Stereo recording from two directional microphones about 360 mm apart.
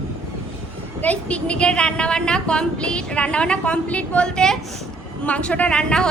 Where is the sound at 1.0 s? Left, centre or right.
Centre.